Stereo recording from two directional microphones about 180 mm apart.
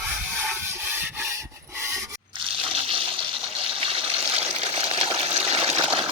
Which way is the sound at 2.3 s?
30° right (ahead or behind).